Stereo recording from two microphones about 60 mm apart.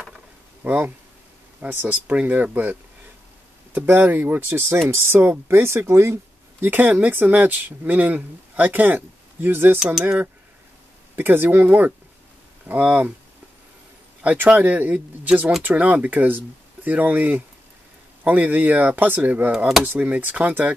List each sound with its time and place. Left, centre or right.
0.7 s speech: right
6.6 s speech: right
14.2 s speech: right